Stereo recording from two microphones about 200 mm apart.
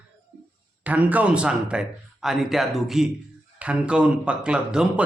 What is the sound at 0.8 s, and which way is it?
Speech, 10° right (ahead or behind).